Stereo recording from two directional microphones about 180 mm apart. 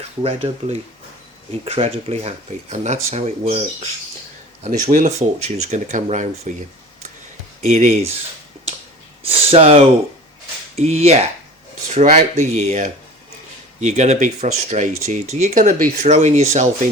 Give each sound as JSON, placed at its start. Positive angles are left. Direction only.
{"t": 0.2, "sound": "speech", "side_deg": -35}
{"t": 7.6, "sound": "speech", "side_deg": -40}
{"t": 9.2, "sound": "speech", "side_deg": -30}